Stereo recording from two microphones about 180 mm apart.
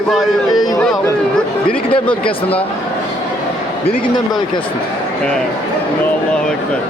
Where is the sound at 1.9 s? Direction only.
30° left (ahead or behind).